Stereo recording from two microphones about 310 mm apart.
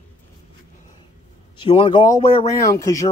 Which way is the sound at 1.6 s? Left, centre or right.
Centre.